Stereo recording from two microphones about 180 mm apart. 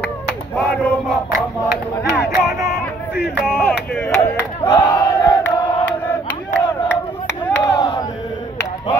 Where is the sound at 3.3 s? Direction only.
5° left (ahead or behind).